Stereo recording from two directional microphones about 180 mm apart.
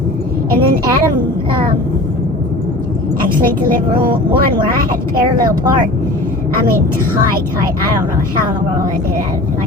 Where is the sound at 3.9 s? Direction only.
25° right (ahead or behind).